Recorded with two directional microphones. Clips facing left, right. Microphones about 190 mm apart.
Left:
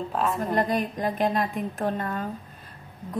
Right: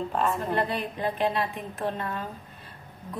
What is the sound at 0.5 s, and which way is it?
A woman's voice, 40° left (ahead or behind).